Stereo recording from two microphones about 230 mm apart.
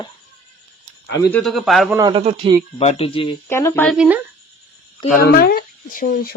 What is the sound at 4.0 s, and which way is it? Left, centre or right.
Speech, centre.